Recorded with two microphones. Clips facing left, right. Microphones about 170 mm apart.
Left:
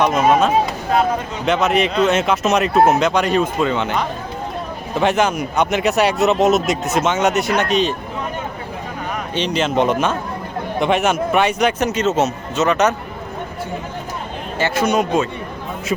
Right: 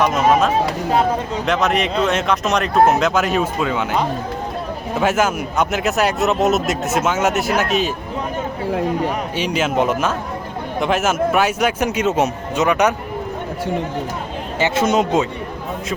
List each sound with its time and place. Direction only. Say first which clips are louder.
0.3 s speech: left 1 dB; centre (ahead or behind)
9.3 s a man's voice: left 1 dB; 5° right (ahead or behind)
14.6 s speech: right 1 dB; 20° right (ahead or behind)